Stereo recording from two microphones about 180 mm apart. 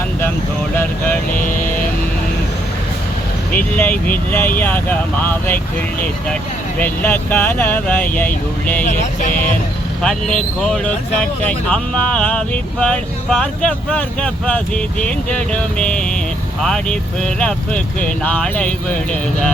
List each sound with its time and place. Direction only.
0.8 s vehicle: 10° left (ahead or behind)
3.6 s speech: 10° left (ahead or behind)
6.7 s speech: 10° left (ahead or behind)
8.8 s music: 45° left (ahead or behind)
10.0 s speech: 5° left (ahead or behind)